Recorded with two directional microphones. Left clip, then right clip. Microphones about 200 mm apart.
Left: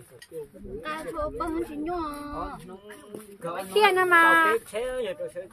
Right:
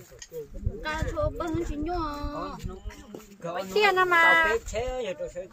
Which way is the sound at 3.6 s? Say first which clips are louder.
Left 1 dB; 35° left (ahead or behind).